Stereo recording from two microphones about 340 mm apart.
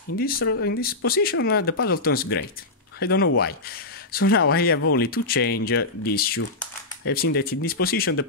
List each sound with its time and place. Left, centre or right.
0.2 s speech: left